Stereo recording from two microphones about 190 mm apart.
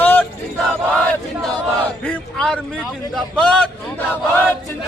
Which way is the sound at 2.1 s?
5° left (ahead or behind).